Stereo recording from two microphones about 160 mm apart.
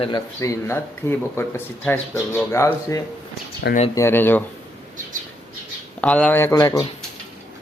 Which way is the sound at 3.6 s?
90° left.